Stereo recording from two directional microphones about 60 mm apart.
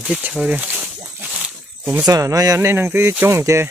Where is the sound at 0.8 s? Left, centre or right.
Centre.